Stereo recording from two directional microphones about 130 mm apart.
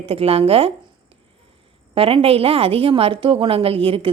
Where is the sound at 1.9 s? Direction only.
45° right (ahead or behind).